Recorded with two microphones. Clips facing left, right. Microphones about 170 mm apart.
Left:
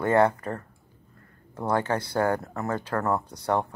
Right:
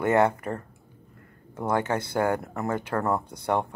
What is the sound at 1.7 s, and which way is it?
Speech, 20° right (ahead or behind).